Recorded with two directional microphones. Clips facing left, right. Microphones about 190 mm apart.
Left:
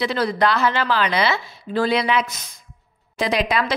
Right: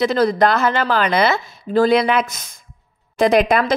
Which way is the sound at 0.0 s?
45° right (ahead or behind).